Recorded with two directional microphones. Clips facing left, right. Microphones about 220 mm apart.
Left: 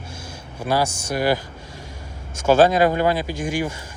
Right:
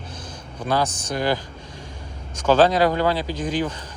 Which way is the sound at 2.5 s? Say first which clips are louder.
Left 1 dB; 10° left (ahead or behind).